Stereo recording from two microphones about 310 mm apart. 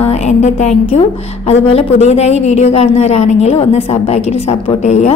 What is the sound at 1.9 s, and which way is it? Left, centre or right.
A woman's voice, left.